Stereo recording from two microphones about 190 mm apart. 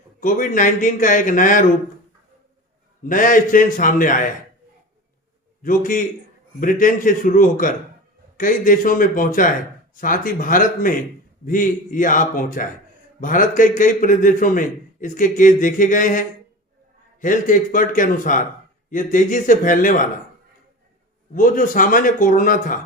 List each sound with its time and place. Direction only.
0.2 s a man's voice: 45° left (ahead or behind)
3.0 s a man's voice: 45° left (ahead or behind)
5.6 s a man's voice: 45° left (ahead or behind)
21.3 s a man's voice: 45° left (ahead or behind)